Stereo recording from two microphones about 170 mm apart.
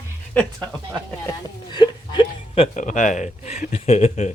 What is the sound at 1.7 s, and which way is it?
Speech, 25° left (ahead or behind).